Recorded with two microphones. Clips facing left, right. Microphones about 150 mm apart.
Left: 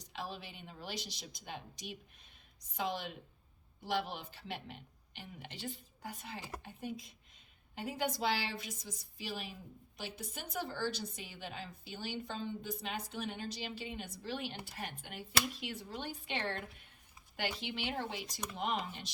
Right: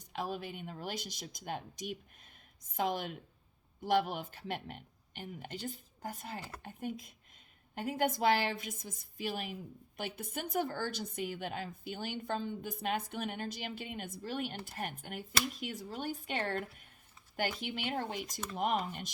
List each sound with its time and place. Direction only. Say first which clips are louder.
0.0 s a woman's voice: right 6 dB; 50° right (ahead or behind)